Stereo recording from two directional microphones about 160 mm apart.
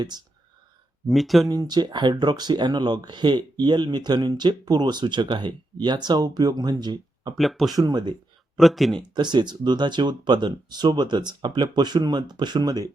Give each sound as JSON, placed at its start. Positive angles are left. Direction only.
{"t": 1.0, "sound": "speech", "side_deg": 0}
{"t": 1.5, "sound": "speech", "side_deg": -25}
{"t": 7.3, "sound": "speech", "side_deg": 0}
{"t": 7.8, "sound": "speech", "side_deg": -25}
{"t": 8.5, "sound": "speech", "side_deg": 0}
{"t": 9.1, "sound": "speech", "side_deg": -30}